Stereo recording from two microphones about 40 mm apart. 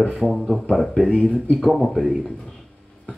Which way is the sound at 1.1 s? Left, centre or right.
Left.